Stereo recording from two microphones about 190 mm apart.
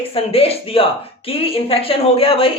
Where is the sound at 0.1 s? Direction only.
30° left (ahead or behind).